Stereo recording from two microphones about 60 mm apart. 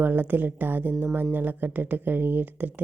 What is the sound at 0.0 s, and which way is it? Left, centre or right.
A woman's voice, right.